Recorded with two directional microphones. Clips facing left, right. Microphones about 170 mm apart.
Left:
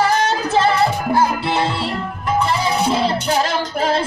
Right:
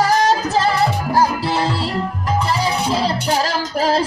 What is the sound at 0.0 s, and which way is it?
Music, 40° right (ahead or behind).